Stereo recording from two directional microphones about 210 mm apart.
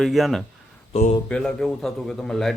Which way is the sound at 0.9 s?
35° left (ahead or behind).